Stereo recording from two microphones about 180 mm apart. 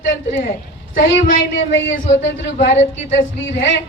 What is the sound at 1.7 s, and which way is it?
Speech, 90° left.